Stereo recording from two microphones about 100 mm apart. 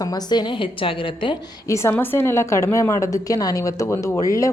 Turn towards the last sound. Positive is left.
turn(degrees=30)  # may be behind; listen again after turning